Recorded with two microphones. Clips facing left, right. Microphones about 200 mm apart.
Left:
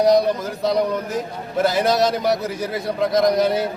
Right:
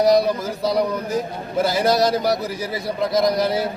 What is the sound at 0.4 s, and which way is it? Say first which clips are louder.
A man's voice: left 1 dB; centre (ahead or behind).